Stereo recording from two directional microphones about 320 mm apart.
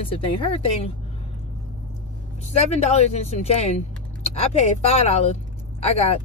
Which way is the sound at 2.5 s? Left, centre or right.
Centre.